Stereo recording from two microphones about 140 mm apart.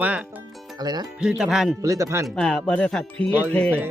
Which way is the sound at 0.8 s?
30° right (ahead or behind).